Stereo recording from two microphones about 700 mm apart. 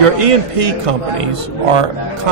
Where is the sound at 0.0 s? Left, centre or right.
Right.